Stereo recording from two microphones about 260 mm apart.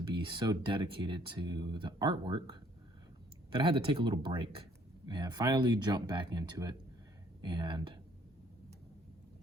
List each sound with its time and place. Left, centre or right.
0.0 s speech: centre